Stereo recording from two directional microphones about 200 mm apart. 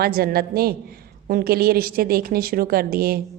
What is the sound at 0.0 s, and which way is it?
Speech, 50° right (ahead or behind).